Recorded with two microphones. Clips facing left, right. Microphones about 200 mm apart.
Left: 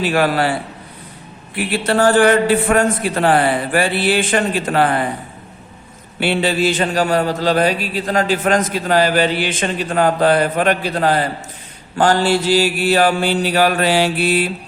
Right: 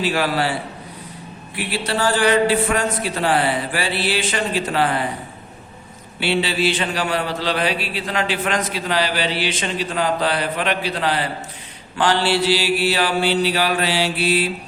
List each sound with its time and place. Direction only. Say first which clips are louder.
0.0 s a man's voice: left 4 dB; 55° left (ahead or behind)
1.5 s a man's voice: left 6 dB; 50° left (ahead or behind)
6.1 s a man's voice: left 4 dB; 50° left (ahead or behind)